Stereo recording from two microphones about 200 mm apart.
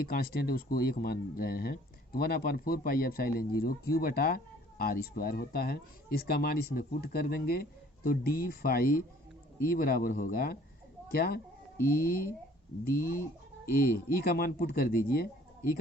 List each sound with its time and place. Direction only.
0.0 s speech: 50° left (ahead or behind)
13.7 s speech: 45° left (ahead or behind)